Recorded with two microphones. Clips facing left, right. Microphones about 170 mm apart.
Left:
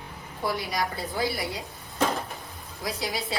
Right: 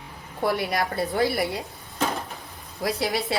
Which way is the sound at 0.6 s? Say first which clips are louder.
Right 5 dB; 60° right (ahead or behind).